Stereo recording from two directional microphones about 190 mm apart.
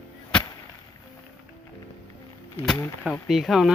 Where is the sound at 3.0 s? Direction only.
Centre (ahead or behind).